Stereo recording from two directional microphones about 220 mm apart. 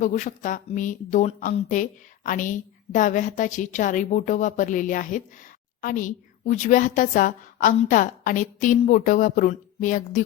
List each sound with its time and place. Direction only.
0.0 s speech: 35° left (ahead or behind)